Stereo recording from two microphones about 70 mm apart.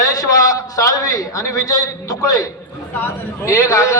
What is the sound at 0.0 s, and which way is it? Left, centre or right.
A man's voice, left.